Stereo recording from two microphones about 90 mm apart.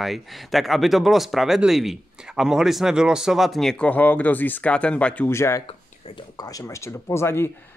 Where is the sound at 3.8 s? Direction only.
15° left (ahead or behind).